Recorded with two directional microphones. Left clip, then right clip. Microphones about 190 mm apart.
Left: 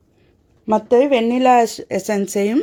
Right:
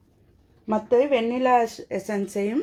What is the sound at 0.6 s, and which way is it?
Speech, 55° left (ahead or behind).